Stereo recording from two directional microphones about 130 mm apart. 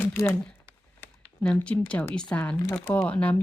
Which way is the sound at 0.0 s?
20° left (ahead or behind).